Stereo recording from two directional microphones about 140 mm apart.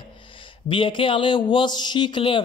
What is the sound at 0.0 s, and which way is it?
Speech, 35° left (ahead or behind).